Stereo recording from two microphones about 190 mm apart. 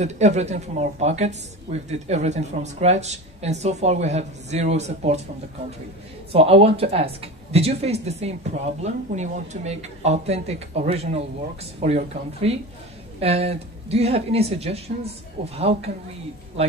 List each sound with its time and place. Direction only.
0.0 s a woman's voice: 35° right (ahead or behind)
6.3 s a woman's voice: 30° right (ahead or behind)